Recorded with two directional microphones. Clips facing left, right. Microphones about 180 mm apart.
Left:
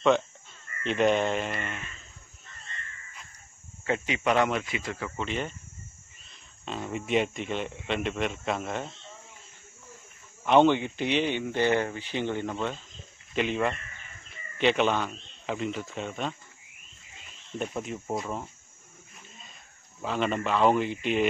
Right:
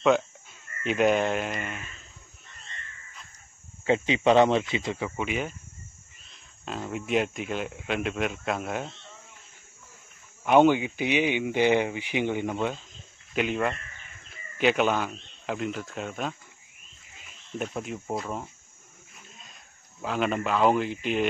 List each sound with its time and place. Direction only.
0.8 s speech: 5° right (ahead or behind)
3.8 s speech: 25° right (ahead or behind); by 5.6 s 5° right (ahead or behind)
6.6 s speech: centre (ahead or behind)
10.4 s speech: 5° right (ahead or behind)
13.3 s speech: centre (ahead or behind)
17.6 s speech: centre (ahead or behind)
19.1 s a sound: centre (ahead or behind)
20.0 s speech: centre (ahead or behind)